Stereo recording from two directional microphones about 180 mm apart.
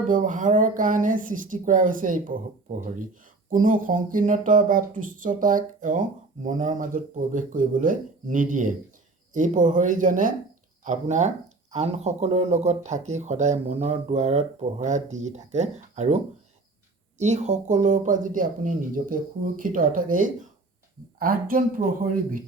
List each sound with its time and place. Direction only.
0.1 s speech: 45° right (ahead or behind)
3.5 s speech: 50° right (ahead or behind)